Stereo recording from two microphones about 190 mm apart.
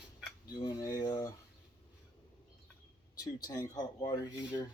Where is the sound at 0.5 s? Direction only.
20° left (ahead or behind).